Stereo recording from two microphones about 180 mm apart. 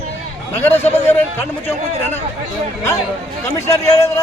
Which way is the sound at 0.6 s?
10° left (ahead or behind).